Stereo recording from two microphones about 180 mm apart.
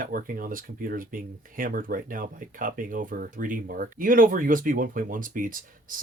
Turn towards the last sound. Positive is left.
turn(degrees=-50)  # may be behind; listen again after turning